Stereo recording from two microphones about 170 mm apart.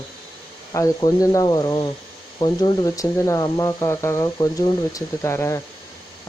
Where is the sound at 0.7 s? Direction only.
20° left (ahead or behind).